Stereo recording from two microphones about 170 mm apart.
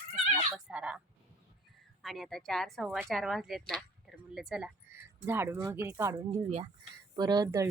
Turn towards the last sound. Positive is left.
turn(degrees=-20)  # may be behind; listen again after turning